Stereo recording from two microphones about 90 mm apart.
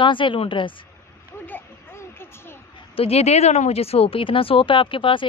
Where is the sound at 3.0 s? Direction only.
90° left.